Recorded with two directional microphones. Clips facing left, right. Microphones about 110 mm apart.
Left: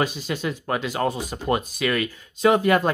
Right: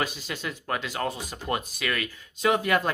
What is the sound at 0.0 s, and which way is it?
Speech, 25° left (ahead or behind).